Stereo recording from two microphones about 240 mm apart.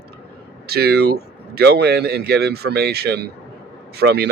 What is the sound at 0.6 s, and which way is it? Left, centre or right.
Speech, right.